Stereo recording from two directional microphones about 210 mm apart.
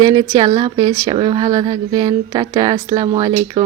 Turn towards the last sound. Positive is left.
turn(degrees=-25)  # may be behind; listen again after turning